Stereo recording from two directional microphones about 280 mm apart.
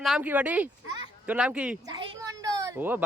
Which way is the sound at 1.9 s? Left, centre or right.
Centre.